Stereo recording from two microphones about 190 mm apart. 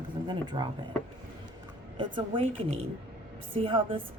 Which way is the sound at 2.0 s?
30° right (ahead or behind).